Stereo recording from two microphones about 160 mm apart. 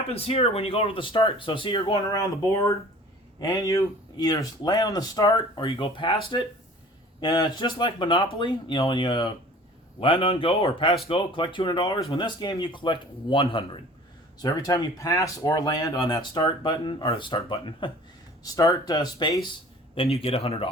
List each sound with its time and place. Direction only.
0.1 s speech: 40° left (ahead or behind)
14.3 s speech: 20° left (ahead or behind)